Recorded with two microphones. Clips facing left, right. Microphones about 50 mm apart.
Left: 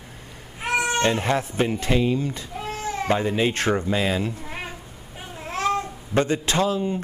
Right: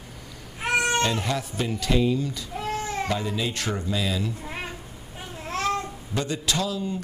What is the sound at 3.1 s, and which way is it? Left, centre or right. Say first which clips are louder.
Speech: left 6 dB; left.